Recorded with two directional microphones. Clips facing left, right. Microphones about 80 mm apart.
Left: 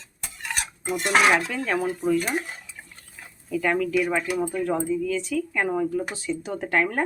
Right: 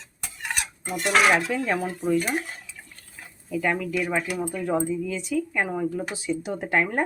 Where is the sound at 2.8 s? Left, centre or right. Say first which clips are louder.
Left 2 dB; centre.